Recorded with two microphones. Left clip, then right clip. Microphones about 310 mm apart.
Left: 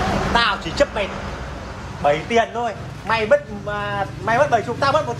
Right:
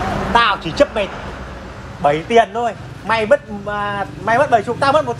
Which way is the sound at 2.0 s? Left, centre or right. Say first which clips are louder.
Right 4 dB; centre.